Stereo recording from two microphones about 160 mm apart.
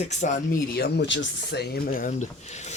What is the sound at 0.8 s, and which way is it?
Speech, 90° left.